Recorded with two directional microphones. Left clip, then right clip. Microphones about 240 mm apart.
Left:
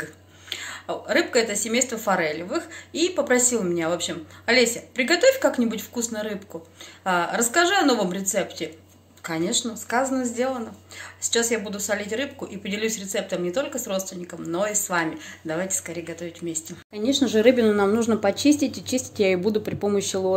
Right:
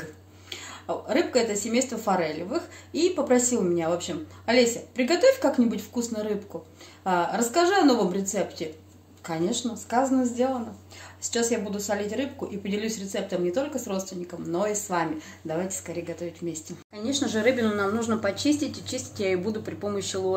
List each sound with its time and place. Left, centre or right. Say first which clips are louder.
0.5 s speech: left 2 dB; centre
16.9 s speech: left 6 dB; left